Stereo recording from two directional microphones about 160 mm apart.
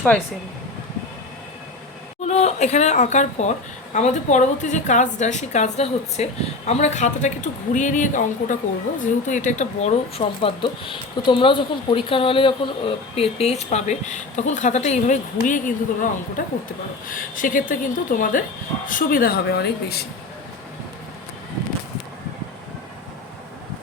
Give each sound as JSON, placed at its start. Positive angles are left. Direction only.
{"t": 2.2, "sound": "a woman's voice", "side_deg": 45}